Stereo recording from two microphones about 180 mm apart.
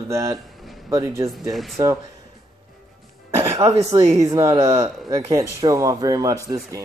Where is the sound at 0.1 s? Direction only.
15° right (ahead or behind).